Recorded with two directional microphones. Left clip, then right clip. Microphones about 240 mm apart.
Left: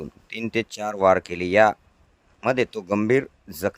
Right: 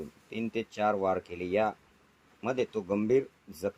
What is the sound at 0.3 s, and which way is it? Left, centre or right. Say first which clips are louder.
Speech: left 9 dB; left.